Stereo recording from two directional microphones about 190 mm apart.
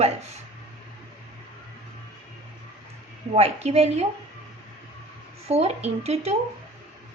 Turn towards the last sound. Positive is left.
turn(degrees=-35)  # may be behind; listen again after turning